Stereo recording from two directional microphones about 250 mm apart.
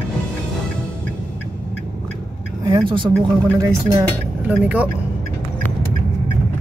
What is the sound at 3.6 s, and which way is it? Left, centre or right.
Speech, centre.